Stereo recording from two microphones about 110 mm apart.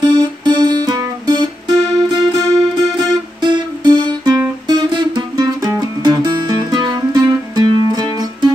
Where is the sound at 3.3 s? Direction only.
45° right (ahead or behind).